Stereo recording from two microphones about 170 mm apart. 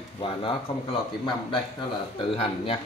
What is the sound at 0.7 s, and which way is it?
Speech, 30° left (ahead or behind).